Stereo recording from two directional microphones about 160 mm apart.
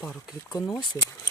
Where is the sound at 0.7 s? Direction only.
25° left (ahead or behind).